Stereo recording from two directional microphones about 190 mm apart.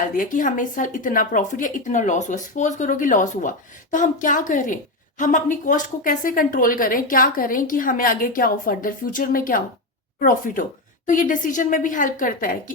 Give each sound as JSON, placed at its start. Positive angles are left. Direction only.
{"t": 0.2, "sound": "a woman's voice", "side_deg": 45}